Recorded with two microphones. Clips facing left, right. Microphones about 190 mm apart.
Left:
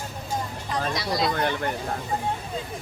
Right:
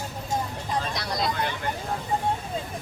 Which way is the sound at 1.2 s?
55° left (ahead or behind).